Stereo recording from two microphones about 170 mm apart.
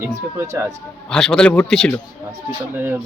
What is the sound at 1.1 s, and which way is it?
Speech, 5° left (ahead or behind).